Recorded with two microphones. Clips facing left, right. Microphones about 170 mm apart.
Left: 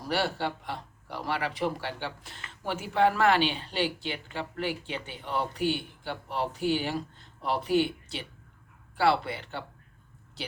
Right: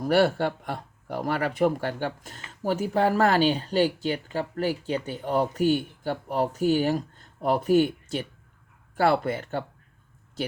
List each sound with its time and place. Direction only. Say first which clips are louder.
0.0 s speech: right 8 dB; 50° right (ahead or behind)